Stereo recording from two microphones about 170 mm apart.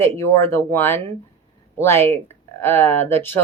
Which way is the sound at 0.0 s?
15° left (ahead or behind).